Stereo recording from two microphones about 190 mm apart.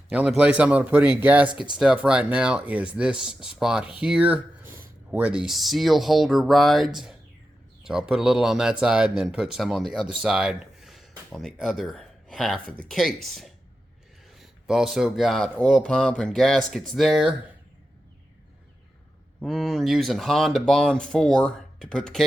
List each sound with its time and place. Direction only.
0.1 s speech: 5° right (ahead or behind)
19.4 s speech: centre (ahead or behind)